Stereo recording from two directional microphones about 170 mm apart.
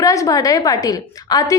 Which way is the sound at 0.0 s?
20° left (ahead or behind).